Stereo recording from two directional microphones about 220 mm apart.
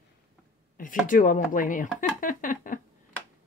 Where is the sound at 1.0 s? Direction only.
35° left (ahead or behind).